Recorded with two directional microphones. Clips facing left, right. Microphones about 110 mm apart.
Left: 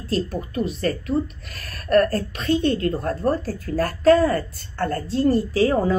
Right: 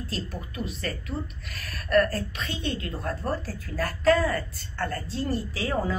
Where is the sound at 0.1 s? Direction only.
45° left (ahead or behind).